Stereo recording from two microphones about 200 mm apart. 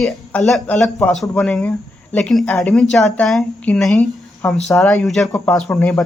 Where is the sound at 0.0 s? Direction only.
Centre (ahead or behind).